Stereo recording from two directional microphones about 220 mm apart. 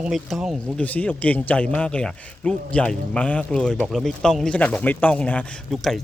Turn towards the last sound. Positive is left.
turn(degrees=0)  # may be behind; listen again after turning